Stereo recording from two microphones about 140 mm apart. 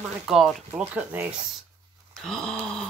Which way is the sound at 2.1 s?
5° left (ahead or behind).